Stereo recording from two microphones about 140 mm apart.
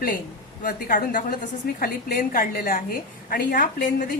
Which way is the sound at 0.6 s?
90° left.